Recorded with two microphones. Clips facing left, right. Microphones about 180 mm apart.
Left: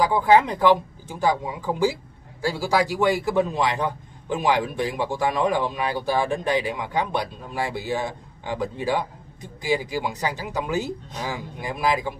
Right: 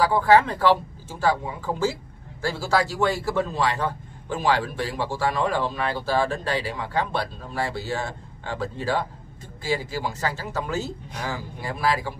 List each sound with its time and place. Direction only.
0.0 s a man's voice: 15° left (ahead or behind)